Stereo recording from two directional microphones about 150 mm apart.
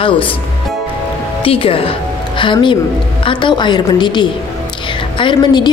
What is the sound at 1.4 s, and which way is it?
A woman's voice, 35° left (ahead or behind).